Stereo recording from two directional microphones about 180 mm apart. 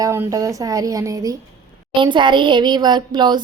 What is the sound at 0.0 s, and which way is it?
Speech, 15° right (ahead or behind).